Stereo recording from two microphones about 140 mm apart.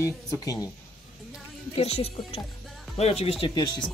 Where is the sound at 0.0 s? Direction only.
25° left (ahead or behind).